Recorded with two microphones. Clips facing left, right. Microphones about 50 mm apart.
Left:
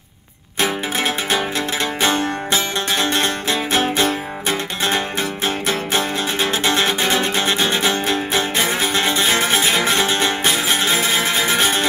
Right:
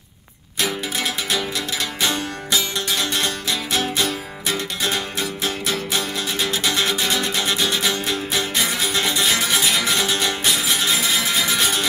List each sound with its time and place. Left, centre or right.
0.6 s music: left